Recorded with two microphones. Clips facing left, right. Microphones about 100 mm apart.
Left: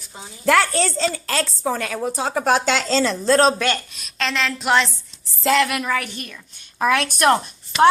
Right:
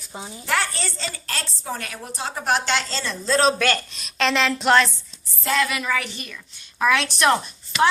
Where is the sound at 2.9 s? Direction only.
80° left.